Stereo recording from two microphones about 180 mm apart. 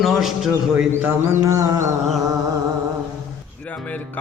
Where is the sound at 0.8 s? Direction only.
5° right (ahead or behind).